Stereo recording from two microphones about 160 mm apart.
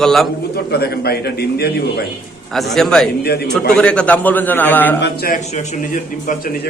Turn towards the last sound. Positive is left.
turn(degrees=70)  # may be behind; listen again after turning